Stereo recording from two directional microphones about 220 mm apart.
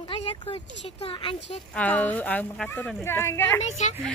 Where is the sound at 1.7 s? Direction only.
5° left (ahead or behind).